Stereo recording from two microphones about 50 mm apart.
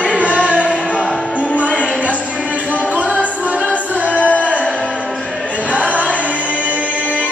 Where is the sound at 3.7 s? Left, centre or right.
Left.